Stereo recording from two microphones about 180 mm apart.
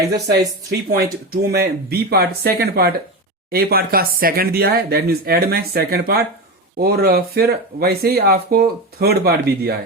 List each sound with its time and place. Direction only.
0.3 s speech: 65° right (ahead or behind)